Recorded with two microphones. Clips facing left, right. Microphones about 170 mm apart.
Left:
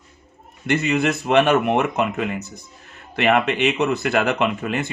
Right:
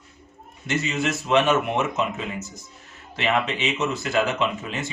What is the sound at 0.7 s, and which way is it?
Speech, 60° left (ahead or behind).